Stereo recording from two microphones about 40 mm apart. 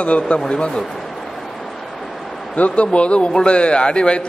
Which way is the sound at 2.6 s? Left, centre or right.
Left.